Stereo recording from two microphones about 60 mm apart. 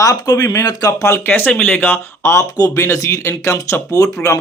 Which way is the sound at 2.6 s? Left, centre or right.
Left.